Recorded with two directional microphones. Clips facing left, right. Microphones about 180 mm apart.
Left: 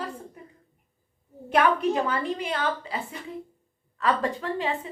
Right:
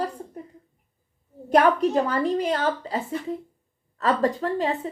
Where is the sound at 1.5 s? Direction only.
40° right (ahead or behind).